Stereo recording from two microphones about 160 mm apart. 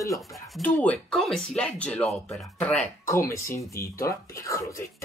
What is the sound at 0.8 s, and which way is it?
Speech, 5° left (ahead or behind).